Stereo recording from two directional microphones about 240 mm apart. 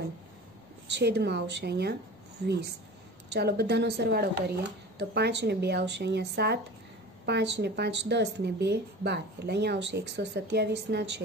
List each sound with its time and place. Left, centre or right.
0.8 s speech: right